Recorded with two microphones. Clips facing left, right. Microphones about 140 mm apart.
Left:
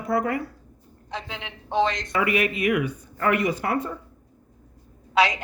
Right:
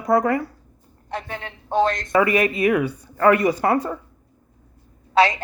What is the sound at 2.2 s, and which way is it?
Speech, 35° right (ahead or behind).